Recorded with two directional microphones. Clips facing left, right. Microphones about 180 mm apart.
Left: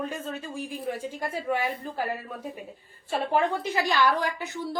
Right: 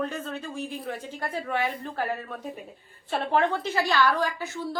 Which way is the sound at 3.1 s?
10° left (ahead or behind).